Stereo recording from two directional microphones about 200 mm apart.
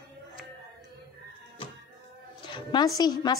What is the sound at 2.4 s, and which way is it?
Speech, 25° left (ahead or behind).